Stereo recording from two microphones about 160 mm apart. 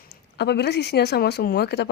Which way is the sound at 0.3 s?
90° left.